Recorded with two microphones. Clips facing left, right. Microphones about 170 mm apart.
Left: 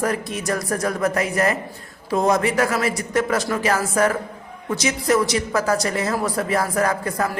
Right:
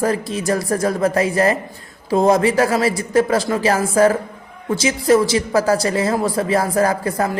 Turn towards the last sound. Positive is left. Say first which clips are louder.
# right 4 dB
turn(degrees=-30)  # may be behind; listen again after turning